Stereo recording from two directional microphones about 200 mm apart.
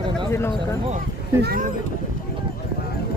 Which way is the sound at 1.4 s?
50° right (ahead or behind).